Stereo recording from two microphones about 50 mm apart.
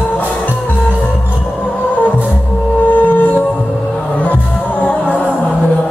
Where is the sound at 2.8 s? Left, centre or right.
Left.